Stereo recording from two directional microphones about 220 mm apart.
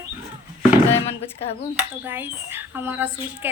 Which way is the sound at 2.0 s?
10° right (ahead or behind).